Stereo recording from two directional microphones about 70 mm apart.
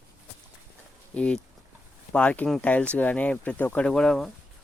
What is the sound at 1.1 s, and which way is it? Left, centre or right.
Speech, centre.